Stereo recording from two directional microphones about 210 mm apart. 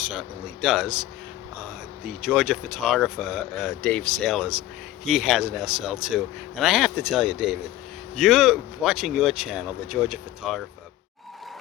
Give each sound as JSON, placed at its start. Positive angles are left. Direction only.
{"t": 0.1, "sound": "speech", "side_deg": -5}
{"t": 2.0, "sound": "speech", "side_deg": -5}